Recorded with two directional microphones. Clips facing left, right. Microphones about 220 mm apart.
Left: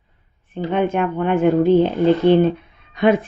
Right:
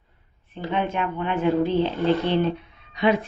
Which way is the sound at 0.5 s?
50° left (ahead or behind).